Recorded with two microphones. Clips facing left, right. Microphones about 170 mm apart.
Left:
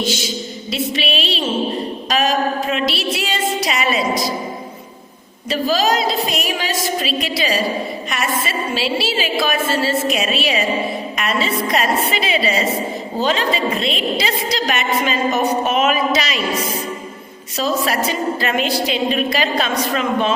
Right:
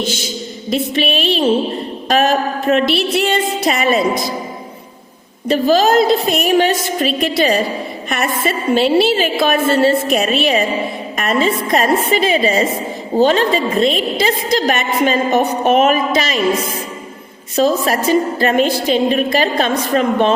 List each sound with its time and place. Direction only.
0.0 s a woman's voice: 50° right (ahead or behind)
5.5 s a woman's voice: 50° right (ahead or behind)
17.6 s a woman's voice: 45° right (ahead or behind)